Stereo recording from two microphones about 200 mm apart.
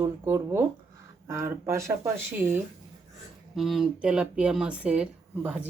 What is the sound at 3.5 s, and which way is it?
Speech, centre (ahead or behind).